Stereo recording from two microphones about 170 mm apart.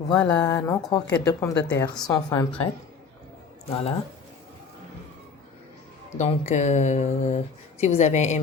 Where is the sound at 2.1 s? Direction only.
20° left (ahead or behind).